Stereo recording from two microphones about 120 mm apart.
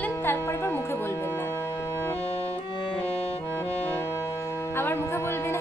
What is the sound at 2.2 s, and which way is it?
Music, 55° left (ahead or behind).